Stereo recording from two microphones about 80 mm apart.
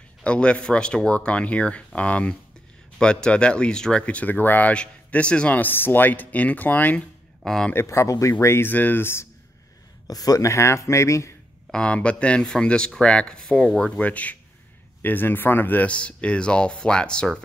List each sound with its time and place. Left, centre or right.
0.2 s speech: centre
7.4 s speech: centre
7.7 s speech: left
10.0 s speech: left
11.7 s speech: centre